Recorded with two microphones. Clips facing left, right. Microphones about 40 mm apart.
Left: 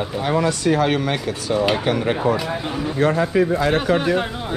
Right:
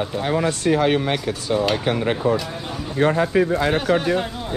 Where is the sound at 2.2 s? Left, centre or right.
Left.